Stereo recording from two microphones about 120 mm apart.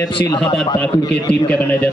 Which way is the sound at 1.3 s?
15° left (ahead or behind).